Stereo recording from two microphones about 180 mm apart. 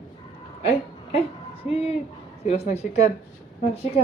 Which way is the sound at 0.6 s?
30° left (ahead or behind).